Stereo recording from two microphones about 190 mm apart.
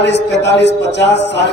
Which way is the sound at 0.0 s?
65° left (ahead or behind).